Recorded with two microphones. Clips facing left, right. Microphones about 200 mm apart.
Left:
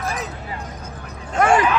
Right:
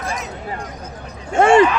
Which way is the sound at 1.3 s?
25° right (ahead or behind).